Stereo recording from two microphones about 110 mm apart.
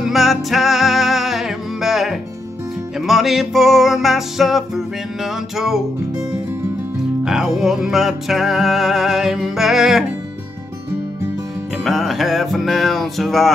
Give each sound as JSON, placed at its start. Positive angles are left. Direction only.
{"t": 0.0, "sound": "music", "side_deg": 0}
{"t": 7.2, "sound": "music", "side_deg": -5}
{"t": 11.8, "sound": "music", "side_deg": 0}